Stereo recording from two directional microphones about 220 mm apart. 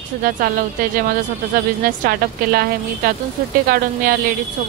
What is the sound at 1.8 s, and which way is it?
Speech, 45° right (ahead or behind).